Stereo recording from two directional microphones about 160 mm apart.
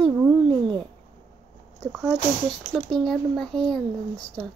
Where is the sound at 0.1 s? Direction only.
10° right (ahead or behind).